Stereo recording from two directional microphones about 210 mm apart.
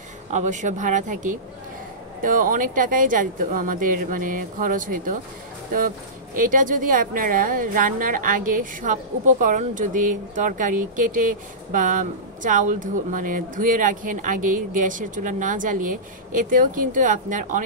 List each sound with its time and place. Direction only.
0.3 s a woman's voice: 35° right (ahead or behind)
6.3 s a woman's voice: 40° right (ahead or behind)